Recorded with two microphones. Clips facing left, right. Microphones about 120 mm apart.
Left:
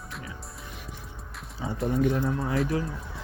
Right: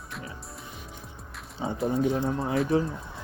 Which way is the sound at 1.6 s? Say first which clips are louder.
Even; 30° right (ahead or behind).